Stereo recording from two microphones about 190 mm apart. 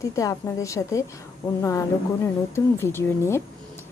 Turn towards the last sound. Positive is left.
turn(degrees=15)  # may be behind; listen again after turning